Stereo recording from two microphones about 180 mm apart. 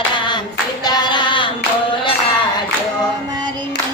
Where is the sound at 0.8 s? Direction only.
25° left (ahead or behind).